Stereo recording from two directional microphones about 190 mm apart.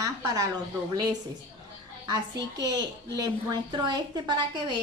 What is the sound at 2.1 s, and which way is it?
A woman's voice, 20° right (ahead or behind).